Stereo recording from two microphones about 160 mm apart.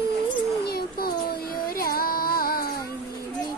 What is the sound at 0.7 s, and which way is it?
Child singing, 70° left (ahead or behind).